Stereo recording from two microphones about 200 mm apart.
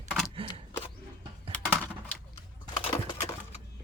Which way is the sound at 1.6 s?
10° left (ahead or behind).